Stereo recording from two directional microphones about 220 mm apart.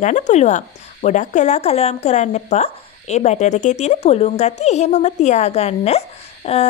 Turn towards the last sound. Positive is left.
turn(degrees=30)  # may be behind; listen again after turning